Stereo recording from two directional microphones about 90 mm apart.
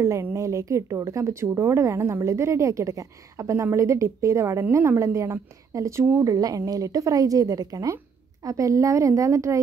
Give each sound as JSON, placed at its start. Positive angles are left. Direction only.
{"t": 0.0, "sound": "speech", "side_deg": -30}